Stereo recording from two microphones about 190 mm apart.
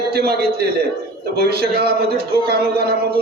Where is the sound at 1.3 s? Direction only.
55° right (ahead or behind).